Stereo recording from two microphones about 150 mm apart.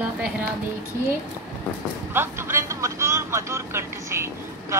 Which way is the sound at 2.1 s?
15° right (ahead or behind).